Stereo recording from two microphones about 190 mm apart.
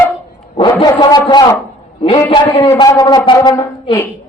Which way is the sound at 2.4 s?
15° left (ahead or behind).